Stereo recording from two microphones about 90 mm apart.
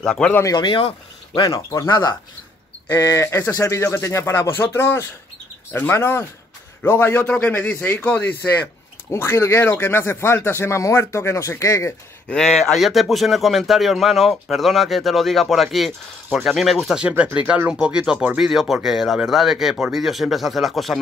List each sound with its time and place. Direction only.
0.0 s speech: 5° left (ahead or behind)
0.5 s speech: 60° left (ahead or behind)
1.4 s speech: 40° left (ahead or behind)
2.9 s speech: 40° left (ahead or behind); by 8.6 s 15° left (ahead or behind)
9.1 s speech: 30° left (ahead or behind)
12.3 s speech: 5° left (ahead or behind)
17.2 s speech: 15° right (ahead or behind)